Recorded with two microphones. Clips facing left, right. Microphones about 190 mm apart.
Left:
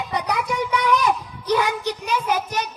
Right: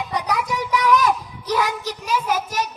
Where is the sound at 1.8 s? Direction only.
Centre (ahead or behind).